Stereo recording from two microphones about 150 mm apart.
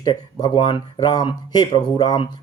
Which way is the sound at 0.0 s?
25° left (ahead or behind).